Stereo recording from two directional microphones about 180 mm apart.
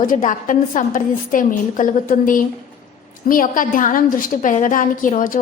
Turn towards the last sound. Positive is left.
turn(degrees=45)  # may be behind; listen again after turning